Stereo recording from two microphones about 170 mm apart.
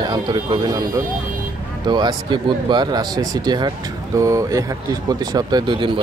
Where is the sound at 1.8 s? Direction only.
25° right (ahead or behind).